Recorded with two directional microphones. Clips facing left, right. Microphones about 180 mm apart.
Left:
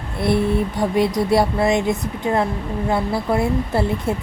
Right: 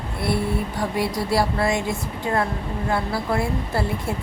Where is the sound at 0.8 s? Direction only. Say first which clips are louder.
Left 7 dB; 20° left (ahead or behind).